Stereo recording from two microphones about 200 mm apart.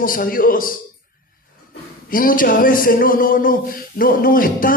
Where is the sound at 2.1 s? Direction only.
45° left (ahead or behind).